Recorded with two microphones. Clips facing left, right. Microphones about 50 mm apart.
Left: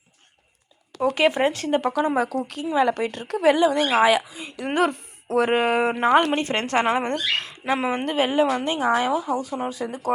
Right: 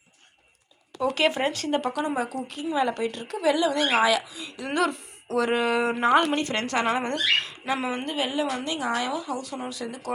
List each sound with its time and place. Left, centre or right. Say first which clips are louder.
1.1 s speech: left 4 dB; left
2.1 s a woman's voice: left 5 dB; left
3.9 s speech: left 4 dB; left